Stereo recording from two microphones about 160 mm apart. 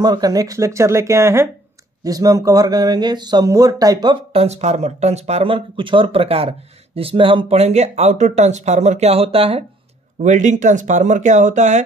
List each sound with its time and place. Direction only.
0.0 s speech: 25° right (ahead or behind)
10.2 s speech: 50° right (ahead or behind)